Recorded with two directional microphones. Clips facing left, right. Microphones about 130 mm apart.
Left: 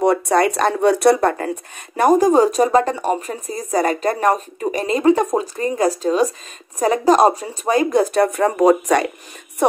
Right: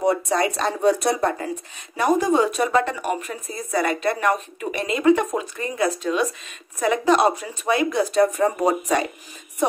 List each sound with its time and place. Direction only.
0.0 s speech: 65° left (ahead or behind)
2.0 s speech: 45° left (ahead or behind); by 9.0 s 85° left